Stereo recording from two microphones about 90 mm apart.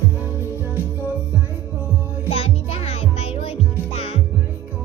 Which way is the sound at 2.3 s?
90° left.